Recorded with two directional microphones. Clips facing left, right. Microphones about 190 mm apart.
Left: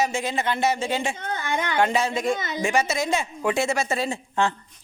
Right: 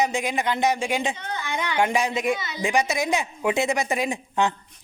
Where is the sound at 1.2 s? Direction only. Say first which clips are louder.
Left 2 dB; 50° left (ahead or behind).